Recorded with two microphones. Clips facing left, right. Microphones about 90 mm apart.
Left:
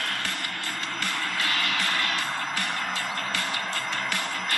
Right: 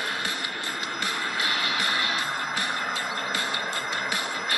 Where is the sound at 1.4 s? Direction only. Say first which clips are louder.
Even; 5° right (ahead or behind).